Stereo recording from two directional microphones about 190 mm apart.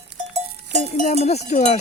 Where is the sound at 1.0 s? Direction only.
35° left (ahead or behind).